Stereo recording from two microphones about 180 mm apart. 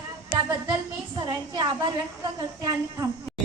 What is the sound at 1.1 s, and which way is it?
A woman's voice, 20° right (ahead or behind).